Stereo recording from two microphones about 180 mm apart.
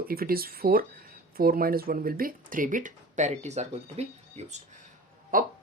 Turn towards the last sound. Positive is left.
turn(degrees=-50)  # may be behind; listen again after turning